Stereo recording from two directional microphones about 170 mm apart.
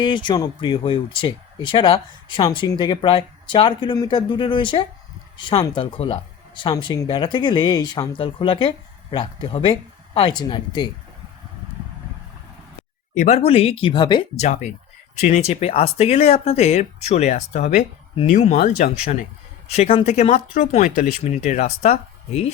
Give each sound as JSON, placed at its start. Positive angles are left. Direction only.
{"t": 0.0, "sound": "speech", "side_deg": 30}
{"t": 13.1, "sound": "speech", "side_deg": 40}
{"t": 14.3, "sound": "speech", "side_deg": 45}
{"t": 20.3, "sound": "speech", "side_deg": 45}